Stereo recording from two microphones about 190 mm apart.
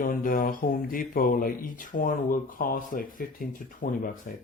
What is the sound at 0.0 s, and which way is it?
Speech, 45° left (ahead or behind).